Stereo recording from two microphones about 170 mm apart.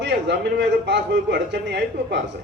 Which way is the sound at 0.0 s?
90° right.